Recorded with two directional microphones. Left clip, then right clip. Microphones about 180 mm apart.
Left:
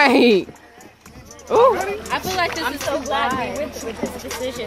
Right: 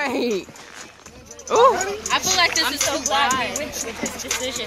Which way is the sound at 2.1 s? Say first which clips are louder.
Right 4 dB; 55° left (ahead or behind).